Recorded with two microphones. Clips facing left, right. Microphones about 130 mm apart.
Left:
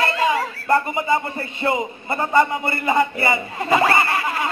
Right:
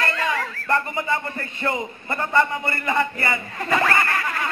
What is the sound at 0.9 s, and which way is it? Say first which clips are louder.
A man's voice: left 4 dB; 15° left (ahead or behind).